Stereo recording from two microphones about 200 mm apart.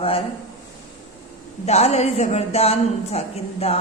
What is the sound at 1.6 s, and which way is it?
A woman's voice, 35° left (ahead or behind).